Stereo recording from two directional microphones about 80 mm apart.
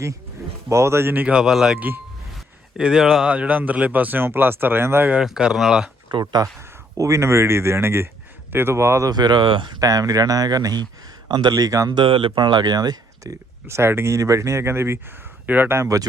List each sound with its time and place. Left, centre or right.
0.7 s speech: right
1.3 s speech: centre
2.3 s a sound: centre
3.3 s speech: centre
5.2 s speech: centre
6.1 s speech: right
6.9 s speech: right
9.0 s speech: right
9.8 s speech: right
11.9 s speech: right
13.7 s speech: right
15.8 s speech: right